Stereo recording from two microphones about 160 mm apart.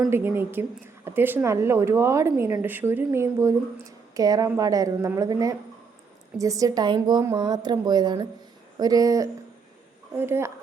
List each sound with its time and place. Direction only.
0.1 s a woman's voice: 15° right (ahead or behind)